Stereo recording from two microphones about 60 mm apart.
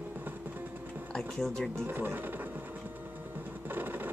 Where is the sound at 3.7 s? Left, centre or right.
Right.